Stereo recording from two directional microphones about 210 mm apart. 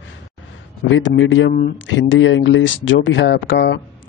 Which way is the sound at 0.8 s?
65° left (ahead or behind).